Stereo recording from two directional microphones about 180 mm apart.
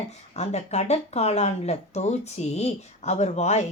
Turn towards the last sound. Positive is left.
turn(degrees=40)  # may be behind; listen again after turning